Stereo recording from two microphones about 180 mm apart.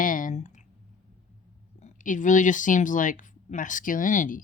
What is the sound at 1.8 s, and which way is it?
Speech, 45° left (ahead or behind).